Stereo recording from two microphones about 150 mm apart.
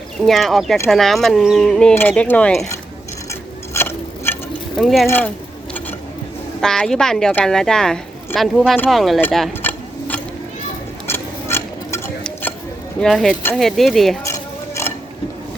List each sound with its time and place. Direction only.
0.3 s speech: centre (ahead or behind)
3.8 s a sound: 15° left (ahead or behind)
4.8 s speech: centre (ahead or behind)
5.0 s speech: 15° left (ahead or behind)
6.6 s speech: 5° left (ahead or behind)
9.6 s a sound: 15° left (ahead or behind)
11.0 s a sound: 15° left (ahead or behind)
13.0 s speech: centre (ahead or behind)
14.3 s cutlery: 15° left (ahead or behind)